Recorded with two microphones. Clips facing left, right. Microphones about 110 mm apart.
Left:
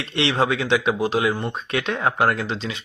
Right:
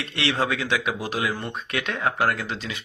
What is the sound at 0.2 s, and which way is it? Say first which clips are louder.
Speech: left 4 dB; 20° left (ahead or behind).